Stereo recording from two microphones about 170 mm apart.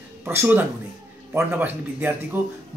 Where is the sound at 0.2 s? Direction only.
15° right (ahead or behind).